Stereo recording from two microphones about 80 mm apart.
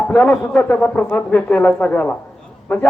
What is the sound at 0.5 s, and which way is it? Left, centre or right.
Brass instrument, centre.